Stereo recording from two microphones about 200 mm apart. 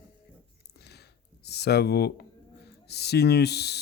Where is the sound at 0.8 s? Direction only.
55° left (ahead or behind).